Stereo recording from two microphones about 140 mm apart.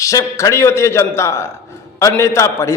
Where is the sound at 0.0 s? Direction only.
25° left (ahead or behind).